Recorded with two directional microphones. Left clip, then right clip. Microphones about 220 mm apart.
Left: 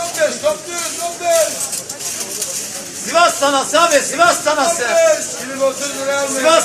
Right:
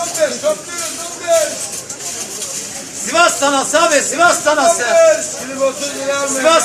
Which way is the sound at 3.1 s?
10° right (ahead or behind).